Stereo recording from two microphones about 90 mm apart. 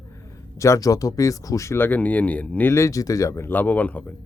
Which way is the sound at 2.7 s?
35° left (ahead or behind).